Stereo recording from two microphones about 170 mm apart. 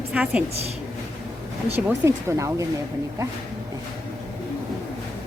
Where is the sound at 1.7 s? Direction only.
15° right (ahead or behind).